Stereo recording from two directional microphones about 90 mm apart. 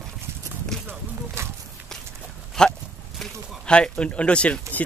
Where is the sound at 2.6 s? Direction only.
5° left (ahead or behind).